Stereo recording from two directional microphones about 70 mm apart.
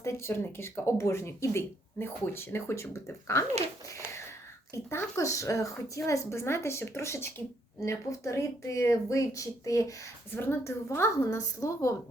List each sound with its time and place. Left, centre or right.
0.0 s speech: left
4.7 s a woman's voice: left
10.3 s a woman's voice: left